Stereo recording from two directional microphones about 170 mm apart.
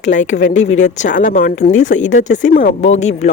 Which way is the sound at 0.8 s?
45° left (ahead or behind).